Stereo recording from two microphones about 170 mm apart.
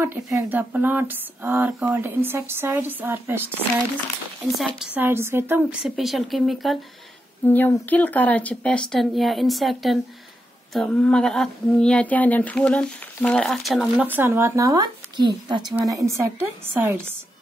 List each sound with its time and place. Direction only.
0.0 s speech: 15° right (ahead or behind)
4.6 s speech: centre (ahead or behind)
5.6 s a sound: 5° right (ahead or behind)
7.4 s speech: 10° left (ahead or behind)
10.7 s a sound: 5° left (ahead or behind)
14.0 s speech: 10° right (ahead or behind)